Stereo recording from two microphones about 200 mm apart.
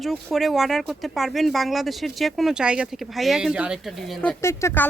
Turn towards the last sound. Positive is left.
turn(degrees=10)  # may be behind; listen again after turning